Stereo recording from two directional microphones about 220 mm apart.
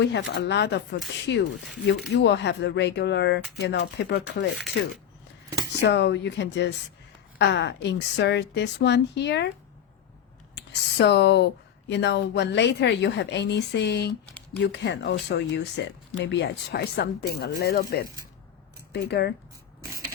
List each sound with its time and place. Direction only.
0.0 s speech: 55° left (ahead or behind)
1.5 s speech: centre (ahead or behind)
2.1 s speech: 50° left (ahead or behind)
5.8 s speech: 50° left (ahead or behind)
10.5 s speech: 50° left (ahead or behind)
19.0 s speech: 50° left (ahead or behind)